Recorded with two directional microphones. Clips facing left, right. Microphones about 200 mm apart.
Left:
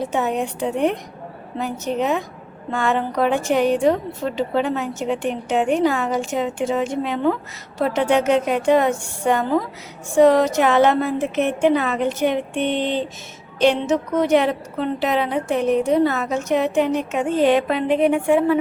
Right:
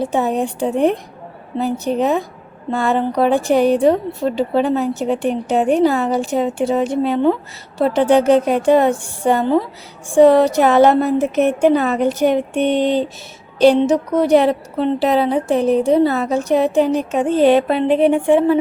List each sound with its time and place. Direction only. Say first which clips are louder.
0.0 s a woman's voice: right 4 dB; 35° right (ahead or behind)